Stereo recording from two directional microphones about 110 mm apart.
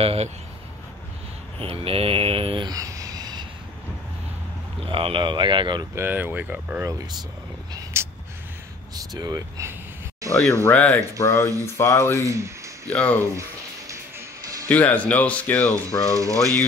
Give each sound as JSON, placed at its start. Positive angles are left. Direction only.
{"t": 0.0, "sound": "mantra", "side_deg": -65}
{"t": 1.6, "sound": "mantra", "side_deg": -60}
{"t": 2.6, "sound": "a sound", "side_deg": -35}
{"t": 4.8, "sound": "speech", "side_deg": -50}
{"t": 5.9, "sound": "speech", "side_deg": -20}
{"t": 8.0, "sound": "a sound", "side_deg": -20}
{"t": 8.9, "sound": "speech", "side_deg": -35}
{"t": 10.3, "sound": "speech", "side_deg": 10}
{"t": 11.1, "sound": "speech", "side_deg": 25}
{"t": 12.3, "sound": "speech", "side_deg": -25}
{"t": 12.8, "sound": "speech", "side_deg": 10}
{"t": 13.2, "sound": "music", "side_deg": -25}
{"t": 14.7, "sound": "speech", "side_deg": 15}
{"t": 15.7, "sound": "speech", "side_deg": -30}